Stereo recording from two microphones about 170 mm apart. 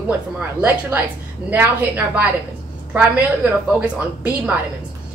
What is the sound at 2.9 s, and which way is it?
A woman's voice, 10° right (ahead or behind).